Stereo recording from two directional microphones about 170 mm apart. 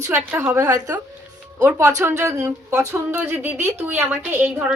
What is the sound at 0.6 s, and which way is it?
A woman's voice, 20° right (ahead or behind).